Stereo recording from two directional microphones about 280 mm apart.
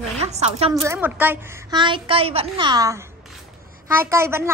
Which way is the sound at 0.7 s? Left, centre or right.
Centre.